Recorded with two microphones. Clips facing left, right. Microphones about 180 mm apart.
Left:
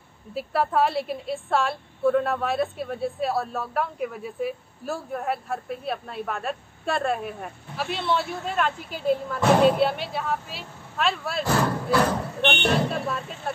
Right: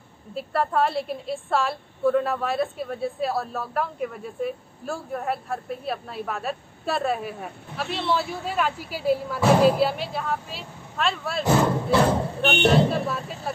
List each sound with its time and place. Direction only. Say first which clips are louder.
0.3 s a woman's voice: even; centre (ahead or behind)
11.4 s speech: right 4 dB; 25° right (ahead or behind)
12.6 s a woman's voice: right 8 dB; centre (ahead or behind)